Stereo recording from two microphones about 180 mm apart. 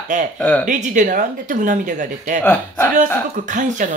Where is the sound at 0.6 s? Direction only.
45° right (ahead or behind).